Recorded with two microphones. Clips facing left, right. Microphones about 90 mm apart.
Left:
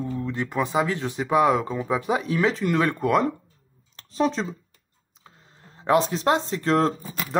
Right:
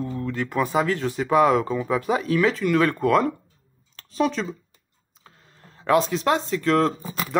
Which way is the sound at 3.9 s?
30° left (ahead or behind).